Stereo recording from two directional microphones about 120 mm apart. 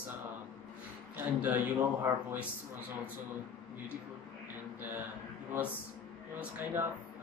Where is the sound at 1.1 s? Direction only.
15° right (ahead or behind).